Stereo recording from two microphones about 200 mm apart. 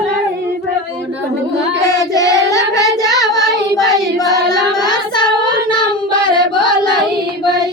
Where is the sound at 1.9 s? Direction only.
15° left (ahead or behind).